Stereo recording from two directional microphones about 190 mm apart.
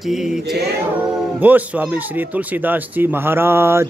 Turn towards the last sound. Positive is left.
turn(degrees=-15)  # may be behind; listen again after turning